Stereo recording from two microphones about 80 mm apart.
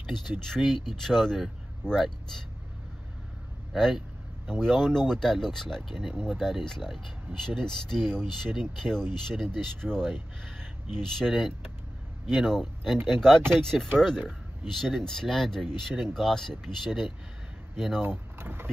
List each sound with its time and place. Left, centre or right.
0.3 s speech: centre
3.7 s speech: centre
11.1 s speech: centre
18.0 s speech: right